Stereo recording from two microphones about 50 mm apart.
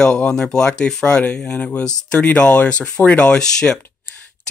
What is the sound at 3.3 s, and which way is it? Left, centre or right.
Speech, centre.